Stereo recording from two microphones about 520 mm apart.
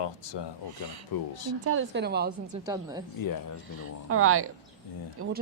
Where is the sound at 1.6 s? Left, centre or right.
Right.